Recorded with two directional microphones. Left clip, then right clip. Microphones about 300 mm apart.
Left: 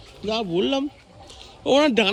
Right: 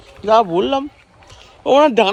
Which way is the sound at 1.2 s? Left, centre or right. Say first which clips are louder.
Right 6 dB; centre.